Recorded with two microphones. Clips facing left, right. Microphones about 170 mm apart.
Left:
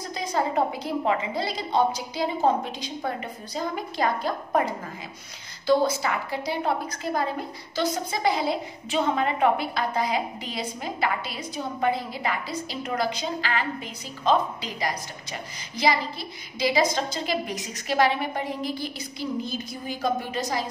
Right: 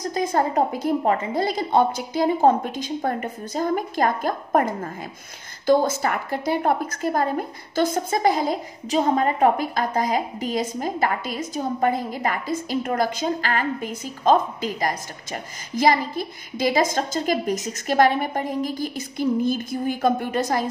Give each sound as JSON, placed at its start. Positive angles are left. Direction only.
{"t": 0.0, "sound": "a woman's voice", "side_deg": -50}